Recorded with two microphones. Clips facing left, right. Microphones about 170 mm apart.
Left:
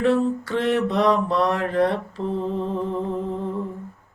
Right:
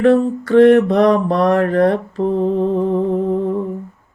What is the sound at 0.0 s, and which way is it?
Mantra, 55° right (ahead or behind).